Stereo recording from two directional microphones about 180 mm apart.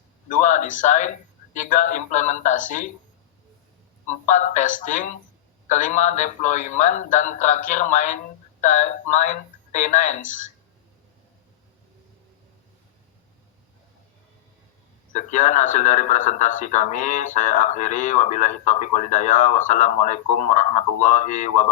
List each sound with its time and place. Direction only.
0.3 s a man's voice: 45° left (ahead or behind)
4.1 s a man's voice: 45° left (ahead or behind)
15.1 s a man's voice: 45° left (ahead or behind)